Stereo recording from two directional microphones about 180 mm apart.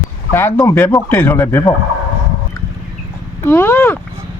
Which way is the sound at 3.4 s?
15° left (ahead or behind).